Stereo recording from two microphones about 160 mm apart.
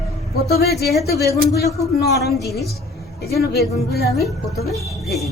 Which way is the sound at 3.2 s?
75° left (ahead or behind).